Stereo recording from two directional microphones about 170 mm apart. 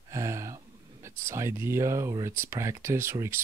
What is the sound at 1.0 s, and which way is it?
Speech, 15° right (ahead or behind).